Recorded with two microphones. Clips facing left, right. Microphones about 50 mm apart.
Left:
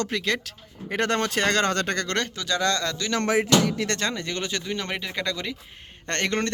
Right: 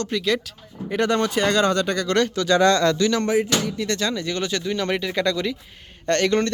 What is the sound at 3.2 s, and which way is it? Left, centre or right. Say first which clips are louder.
Music: even; left.